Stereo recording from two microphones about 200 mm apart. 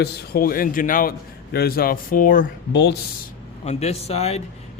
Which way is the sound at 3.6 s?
30° left (ahead or behind).